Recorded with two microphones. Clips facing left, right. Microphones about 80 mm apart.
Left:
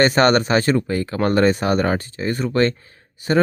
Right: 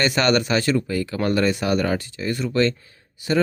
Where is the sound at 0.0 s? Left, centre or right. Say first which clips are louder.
Left 5 dB; left.